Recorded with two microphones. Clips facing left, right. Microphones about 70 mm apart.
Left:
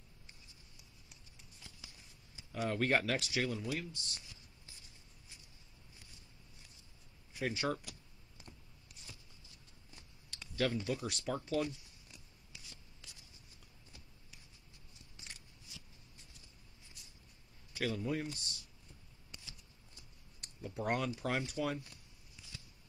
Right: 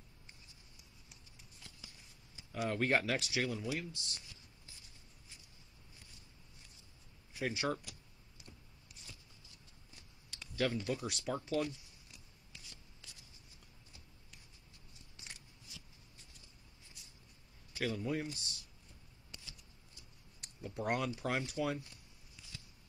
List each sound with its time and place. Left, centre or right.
1.6 s a sound: centre
2.5 s speech: centre
7.3 s speech: centre
10.3 s typing: centre
10.8 s speech: centre
12.5 s writing: centre
17.7 s speech: centre
20.3 s a sound: centre
21.6 s speech: centre